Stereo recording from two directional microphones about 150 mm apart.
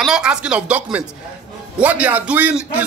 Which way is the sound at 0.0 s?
5° right (ahead or behind).